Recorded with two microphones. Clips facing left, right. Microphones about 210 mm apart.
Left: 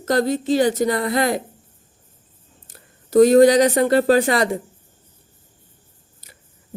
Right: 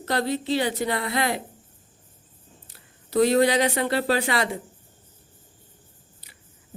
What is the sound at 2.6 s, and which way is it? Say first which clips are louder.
Speech: left 4 dB; 45° left (ahead or behind).